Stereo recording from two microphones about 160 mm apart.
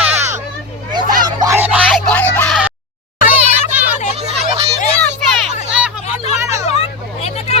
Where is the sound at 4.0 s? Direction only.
50° left (ahead or behind).